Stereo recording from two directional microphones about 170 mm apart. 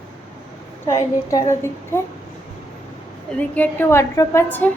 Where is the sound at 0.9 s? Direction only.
20° left (ahead or behind).